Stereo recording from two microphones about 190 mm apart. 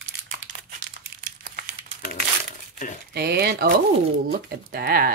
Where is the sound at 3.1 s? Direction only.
55° right (ahead or behind).